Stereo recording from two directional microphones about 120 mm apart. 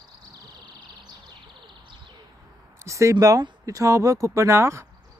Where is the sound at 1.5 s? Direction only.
40° right (ahead or behind).